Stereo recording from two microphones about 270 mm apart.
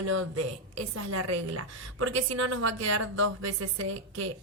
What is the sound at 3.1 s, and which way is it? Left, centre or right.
A woman's voice, right.